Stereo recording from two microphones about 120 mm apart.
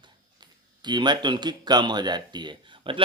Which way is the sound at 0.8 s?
40° right (ahead or behind).